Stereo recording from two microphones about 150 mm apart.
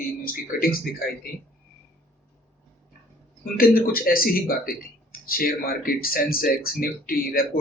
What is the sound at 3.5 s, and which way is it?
Speech, 75° left (ahead or behind).